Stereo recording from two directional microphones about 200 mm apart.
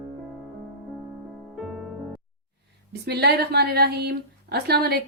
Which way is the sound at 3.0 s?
55° right (ahead or behind).